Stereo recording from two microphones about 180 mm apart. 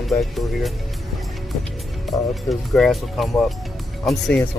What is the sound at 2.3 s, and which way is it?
Speech, centre (ahead or behind).